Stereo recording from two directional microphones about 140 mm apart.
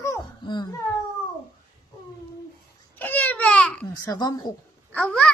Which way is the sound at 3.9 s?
25° left (ahead or behind).